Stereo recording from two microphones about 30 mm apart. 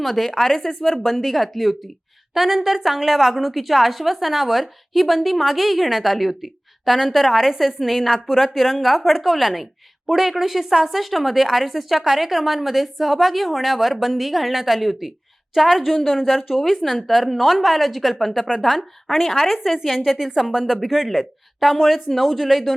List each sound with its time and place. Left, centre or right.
0.0 s a woman's voice: centre
20.7 s a woman's voice: centre